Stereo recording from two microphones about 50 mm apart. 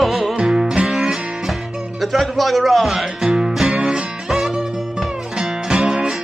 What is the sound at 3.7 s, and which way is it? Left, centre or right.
Music, right.